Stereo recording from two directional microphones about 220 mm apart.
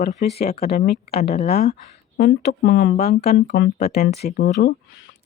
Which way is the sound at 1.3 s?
35° left (ahead or behind).